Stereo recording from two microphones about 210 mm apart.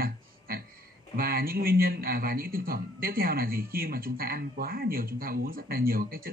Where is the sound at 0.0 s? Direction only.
45° right (ahead or behind).